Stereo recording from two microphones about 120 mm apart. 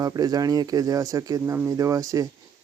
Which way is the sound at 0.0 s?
30° right (ahead or behind).